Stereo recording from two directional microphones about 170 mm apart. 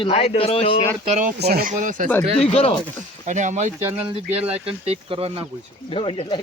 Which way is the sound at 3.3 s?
45° right (ahead or behind).